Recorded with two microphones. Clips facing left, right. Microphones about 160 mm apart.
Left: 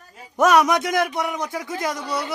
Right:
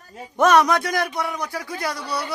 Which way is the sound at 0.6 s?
20° left (ahead or behind).